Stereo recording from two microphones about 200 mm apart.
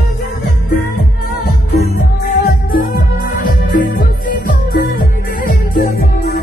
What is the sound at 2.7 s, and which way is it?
Music, 45° left (ahead or behind).